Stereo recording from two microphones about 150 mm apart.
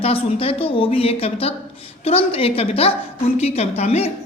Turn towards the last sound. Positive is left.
turn(degrees=45)  # may be behind; listen again after turning